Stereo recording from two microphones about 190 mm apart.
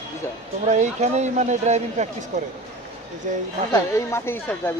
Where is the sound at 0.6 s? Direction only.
35° right (ahead or behind).